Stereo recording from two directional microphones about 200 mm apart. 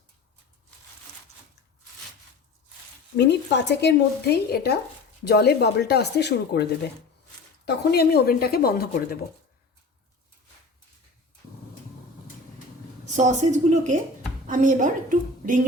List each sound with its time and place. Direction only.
3.2 s speech: 60° left (ahead or behind)
13.1 s a woman's voice: 35° right (ahead or behind)